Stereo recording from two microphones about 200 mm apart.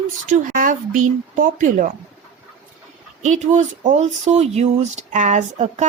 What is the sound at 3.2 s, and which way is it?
Speech, 35° right (ahead or behind).